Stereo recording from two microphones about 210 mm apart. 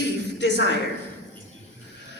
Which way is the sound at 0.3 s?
55° left (ahead or behind).